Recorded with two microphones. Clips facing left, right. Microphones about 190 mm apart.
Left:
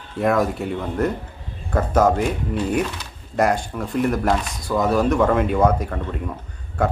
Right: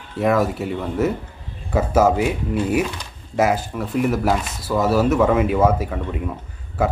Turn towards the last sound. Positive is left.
turn(degrees=-5)  # may be behind; listen again after turning